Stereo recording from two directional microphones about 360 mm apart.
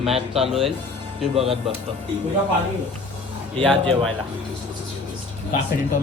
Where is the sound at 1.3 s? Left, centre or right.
Centre.